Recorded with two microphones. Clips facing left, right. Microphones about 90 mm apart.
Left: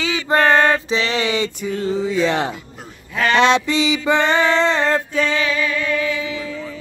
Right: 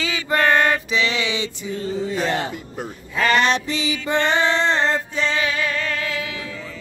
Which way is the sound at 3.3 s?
90° left.